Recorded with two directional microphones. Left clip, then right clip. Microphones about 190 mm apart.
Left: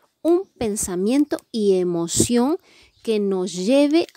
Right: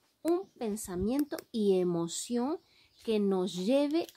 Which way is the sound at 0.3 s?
35° left (ahead or behind).